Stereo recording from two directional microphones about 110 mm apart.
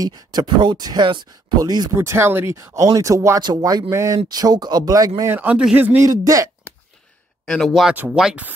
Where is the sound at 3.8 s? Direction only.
25° right (ahead or behind).